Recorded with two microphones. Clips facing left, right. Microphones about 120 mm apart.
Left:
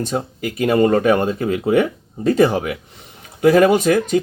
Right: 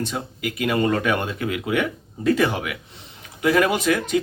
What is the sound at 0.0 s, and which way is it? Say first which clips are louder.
Speech: left 5 dB; 40° left (ahead or behind).